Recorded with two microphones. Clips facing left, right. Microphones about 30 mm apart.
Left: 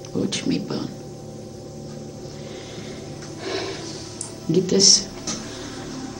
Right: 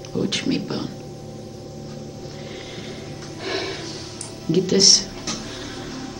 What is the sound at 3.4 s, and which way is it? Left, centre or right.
Gasp, right.